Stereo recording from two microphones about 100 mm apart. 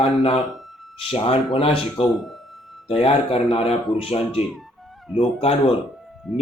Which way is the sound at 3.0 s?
75° left (ahead or behind).